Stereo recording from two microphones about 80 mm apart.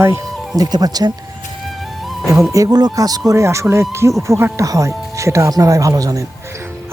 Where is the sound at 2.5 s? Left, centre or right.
Right.